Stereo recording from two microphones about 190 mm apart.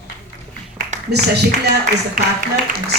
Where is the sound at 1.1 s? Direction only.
60° right (ahead or behind).